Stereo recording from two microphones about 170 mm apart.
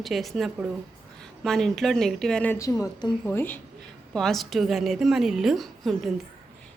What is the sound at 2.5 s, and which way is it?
Speech, 20° left (ahead or behind).